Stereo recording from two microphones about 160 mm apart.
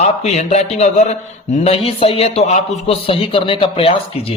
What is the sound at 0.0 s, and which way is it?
A man's voice, 45° left (ahead or behind).